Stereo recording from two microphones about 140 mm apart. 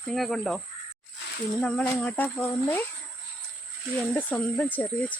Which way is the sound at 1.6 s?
5° left (ahead or behind).